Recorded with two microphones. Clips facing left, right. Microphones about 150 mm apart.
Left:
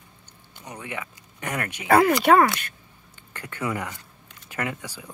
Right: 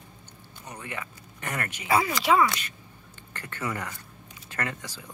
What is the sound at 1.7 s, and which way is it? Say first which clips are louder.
Speech: left 8 dB; 60° left (ahead or behind).